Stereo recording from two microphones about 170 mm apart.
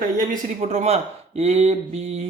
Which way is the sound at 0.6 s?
40° right (ahead or behind).